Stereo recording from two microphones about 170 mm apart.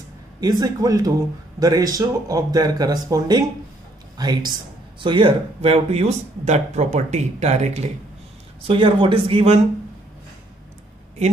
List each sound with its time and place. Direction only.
0.4 s speech: 25° right (ahead or behind)